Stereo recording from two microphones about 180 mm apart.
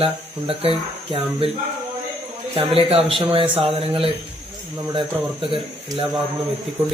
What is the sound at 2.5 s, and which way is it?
Speech, 30° right (ahead or behind).